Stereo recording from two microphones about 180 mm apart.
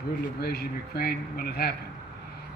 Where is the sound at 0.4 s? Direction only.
60° left (ahead or behind).